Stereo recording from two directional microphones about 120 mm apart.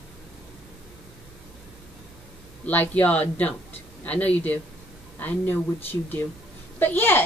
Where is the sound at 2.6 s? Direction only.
15° left (ahead or behind).